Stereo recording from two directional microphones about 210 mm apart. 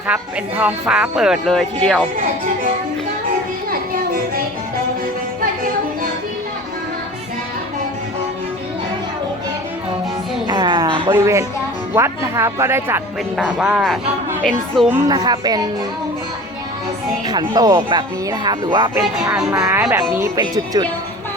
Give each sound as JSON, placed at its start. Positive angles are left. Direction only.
{"t": 0.1, "sound": "speech", "side_deg": -5}
{"t": 3.7, "sound": "music", "side_deg": -45}
{"t": 10.4, "sound": "music", "side_deg": -20}
{"t": 11.0, "sound": "speech", "side_deg": -20}
{"t": 14.8, "sound": "speech", "side_deg": -15}
{"t": 17.2, "sound": "speech", "side_deg": -20}